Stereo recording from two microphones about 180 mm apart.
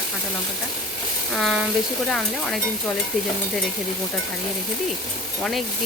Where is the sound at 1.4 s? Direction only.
Centre (ahead or behind).